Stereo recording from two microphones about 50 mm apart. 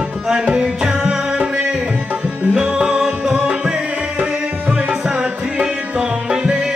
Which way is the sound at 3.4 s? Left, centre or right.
Right.